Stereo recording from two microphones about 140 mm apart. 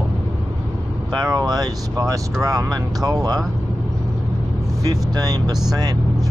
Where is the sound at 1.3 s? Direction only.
30° right (ahead or behind).